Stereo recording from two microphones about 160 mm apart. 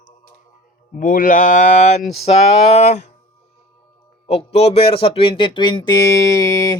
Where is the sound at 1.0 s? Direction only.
60° left (ahead or behind).